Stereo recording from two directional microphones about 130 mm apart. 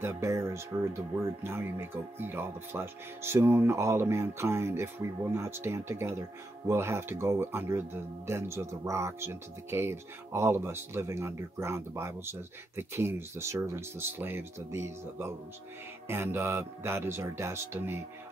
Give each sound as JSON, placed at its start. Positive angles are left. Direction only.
{"t": 0.0, "sound": "speech", "side_deg": -20}